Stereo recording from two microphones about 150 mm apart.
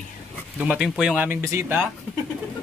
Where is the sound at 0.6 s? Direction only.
5° right (ahead or behind).